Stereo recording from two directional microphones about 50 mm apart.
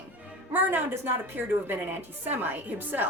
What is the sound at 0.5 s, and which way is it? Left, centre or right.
A woman's voice, right.